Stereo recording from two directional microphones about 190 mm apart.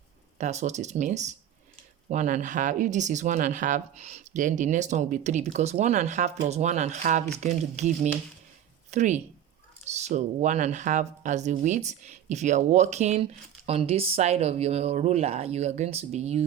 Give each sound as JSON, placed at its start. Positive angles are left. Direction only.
{"t": 0.3, "sound": "speech", "side_deg": -35}